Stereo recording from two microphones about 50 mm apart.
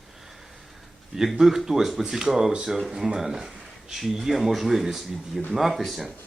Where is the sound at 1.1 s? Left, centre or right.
Centre.